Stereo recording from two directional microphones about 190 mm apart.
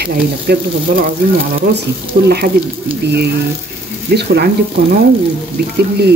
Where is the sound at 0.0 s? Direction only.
55° right (ahead or behind).